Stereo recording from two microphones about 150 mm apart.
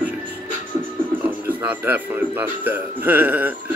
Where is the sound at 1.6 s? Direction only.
10° right (ahead or behind).